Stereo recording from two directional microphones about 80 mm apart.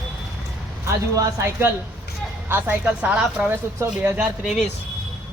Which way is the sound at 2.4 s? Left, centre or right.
Right.